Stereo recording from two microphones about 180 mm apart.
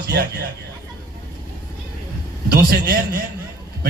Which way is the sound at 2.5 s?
60° right (ahead or behind).